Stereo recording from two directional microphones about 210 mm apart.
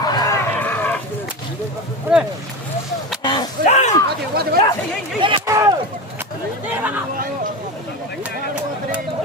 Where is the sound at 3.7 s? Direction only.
35° left (ahead or behind).